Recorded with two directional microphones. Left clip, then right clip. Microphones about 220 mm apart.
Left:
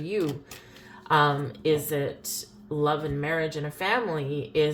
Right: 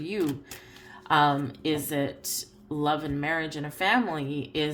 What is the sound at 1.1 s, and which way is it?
Speech, 45° right (ahead or behind).